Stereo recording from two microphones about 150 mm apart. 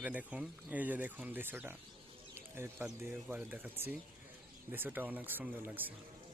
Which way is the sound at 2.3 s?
15° right (ahead or behind).